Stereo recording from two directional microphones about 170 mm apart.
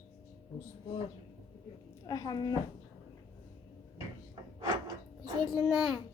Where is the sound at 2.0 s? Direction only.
25° left (ahead or behind).